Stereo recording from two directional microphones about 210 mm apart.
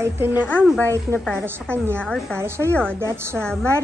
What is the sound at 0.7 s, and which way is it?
A woman's voice, 10° left (ahead or behind).